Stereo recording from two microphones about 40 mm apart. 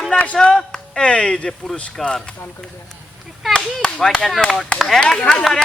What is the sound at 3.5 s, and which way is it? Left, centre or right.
Speech, left.